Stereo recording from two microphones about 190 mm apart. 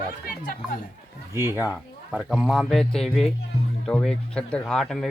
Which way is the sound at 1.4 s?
10° right (ahead or behind).